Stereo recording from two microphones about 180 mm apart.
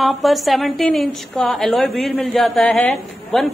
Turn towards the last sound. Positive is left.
turn(degrees=0)  # may be behind; listen again after turning